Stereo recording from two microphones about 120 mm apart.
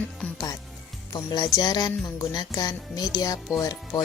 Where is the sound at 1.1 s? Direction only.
35° left (ahead or behind).